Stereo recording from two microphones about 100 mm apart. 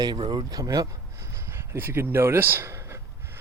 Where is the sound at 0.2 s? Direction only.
55° right (ahead or behind).